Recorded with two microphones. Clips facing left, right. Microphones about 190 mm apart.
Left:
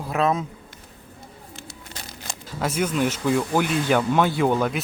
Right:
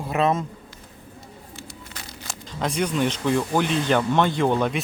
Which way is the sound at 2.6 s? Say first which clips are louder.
Even; 5° left (ahead or behind).